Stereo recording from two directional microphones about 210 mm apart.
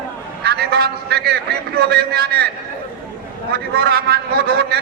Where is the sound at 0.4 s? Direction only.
50° right (ahead or behind).